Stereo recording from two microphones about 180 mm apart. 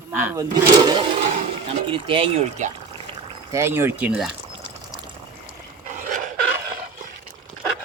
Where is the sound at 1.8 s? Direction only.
30° right (ahead or behind).